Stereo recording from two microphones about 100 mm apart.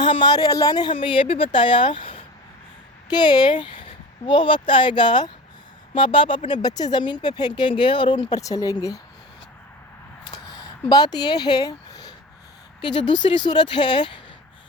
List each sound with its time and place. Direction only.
0.0 s speech: 50° left (ahead or behind)
0.9 s speech: 60° left (ahead or behind)
3.1 s speech: 45° left (ahead or behind)
8.4 s speech: 35° left (ahead or behind)
10.2 s a sound: 45° left (ahead or behind)
12.8 s speech: 50° left (ahead or behind)